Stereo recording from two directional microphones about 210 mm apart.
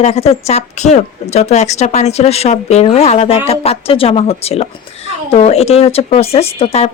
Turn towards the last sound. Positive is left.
turn(degrees=30)  # may be behind; listen again after turning